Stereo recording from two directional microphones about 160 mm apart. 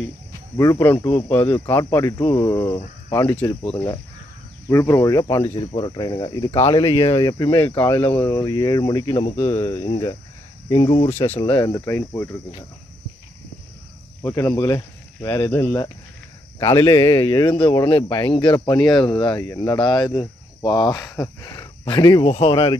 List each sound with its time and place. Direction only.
0.6 s a man's voice: 20° left (ahead or behind)
3.6 s speech: 35° left (ahead or behind)
4.6 s a man's voice: 15° left (ahead or behind); by 11.2 s 35° left (ahead or behind)
11.6 s a man's voice: 20° left (ahead or behind)
14.2 s a man's voice: 20° left (ahead or behind)
16.5 s a man's voice: 25° left (ahead or behind)
22.3 s speech: 40° left (ahead or behind)